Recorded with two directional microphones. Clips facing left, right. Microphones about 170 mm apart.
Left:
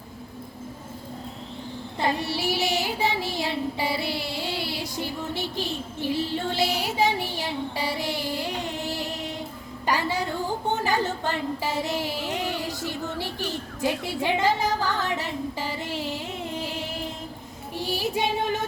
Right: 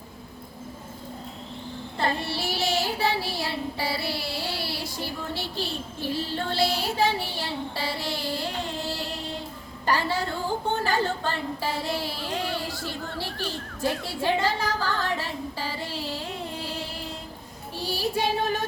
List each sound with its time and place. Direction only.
2.0 s child singing: 15° left (ahead or behind)
9.8 s a sound: 15° left (ahead or behind)
17.7 s female singing: 20° left (ahead or behind)